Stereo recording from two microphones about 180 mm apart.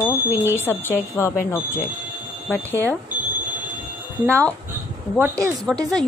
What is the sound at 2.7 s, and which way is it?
Speech, 10° left (ahead or behind).